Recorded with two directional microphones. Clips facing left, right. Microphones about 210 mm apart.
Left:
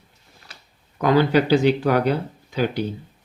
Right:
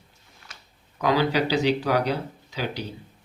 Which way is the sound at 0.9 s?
50° left (ahead or behind).